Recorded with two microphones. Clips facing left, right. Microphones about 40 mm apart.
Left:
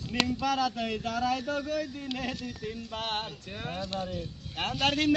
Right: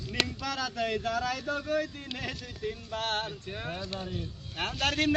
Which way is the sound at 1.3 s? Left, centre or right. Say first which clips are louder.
Left 2 dB; left.